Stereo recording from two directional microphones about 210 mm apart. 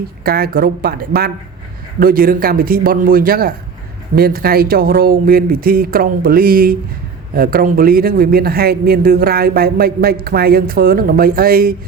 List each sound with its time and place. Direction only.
0.3 s speech: 45° right (ahead or behind)